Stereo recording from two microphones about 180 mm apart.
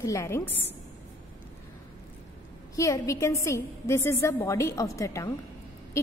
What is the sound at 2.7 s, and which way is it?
A woman's voice, 20° left (ahead or behind).